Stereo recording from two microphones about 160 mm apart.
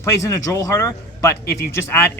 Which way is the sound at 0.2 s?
20° left (ahead or behind).